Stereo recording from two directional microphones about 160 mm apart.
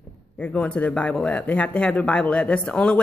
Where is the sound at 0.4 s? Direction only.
5° left (ahead or behind).